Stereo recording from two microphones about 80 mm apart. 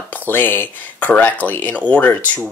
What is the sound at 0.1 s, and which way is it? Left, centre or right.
Speech, left.